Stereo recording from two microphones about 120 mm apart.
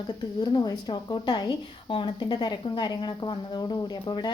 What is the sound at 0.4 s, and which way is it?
A woman's voice, 35° left (ahead or behind).